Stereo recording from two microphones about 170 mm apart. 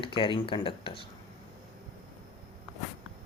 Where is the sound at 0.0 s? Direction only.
30° left (ahead or behind).